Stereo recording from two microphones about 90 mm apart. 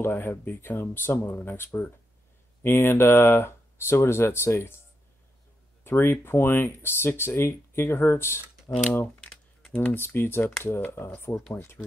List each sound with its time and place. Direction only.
0.0 s speech: 25° left (ahead or behind)
5.9 s speech: 25° left (ahead or behind)
8.9 s typing: 15° left (ahead or behind)
9.8 s speech: 25° left (ahead or behind)